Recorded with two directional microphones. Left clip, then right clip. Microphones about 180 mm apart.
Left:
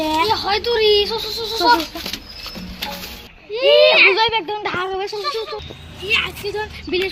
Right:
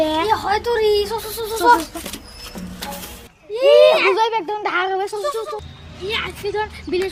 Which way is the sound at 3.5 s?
15° right (ahead or behind).